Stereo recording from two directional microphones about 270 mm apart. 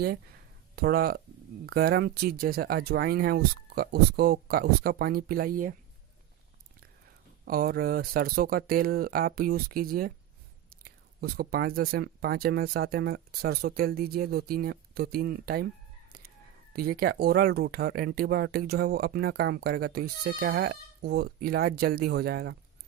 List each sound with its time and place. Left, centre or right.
0.8 s speech: right
7.4 s speech: right
16.7 s speech: right